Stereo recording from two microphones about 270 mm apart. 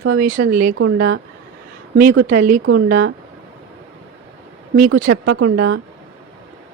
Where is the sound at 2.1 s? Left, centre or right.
Right.